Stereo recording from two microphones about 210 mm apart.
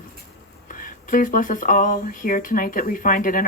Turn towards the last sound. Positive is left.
turn(degrees=40)  # may be behind; listen again after turning